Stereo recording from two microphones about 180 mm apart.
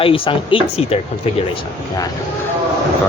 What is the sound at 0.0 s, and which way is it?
Speech, 30° left (ahead or behind).